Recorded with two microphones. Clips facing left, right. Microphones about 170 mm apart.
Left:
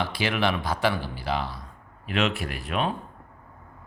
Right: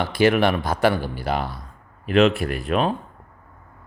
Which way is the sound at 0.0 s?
50° right (ahead or behind).